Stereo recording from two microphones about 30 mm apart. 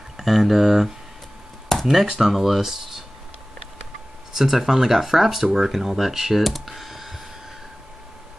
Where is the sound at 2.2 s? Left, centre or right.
Centre.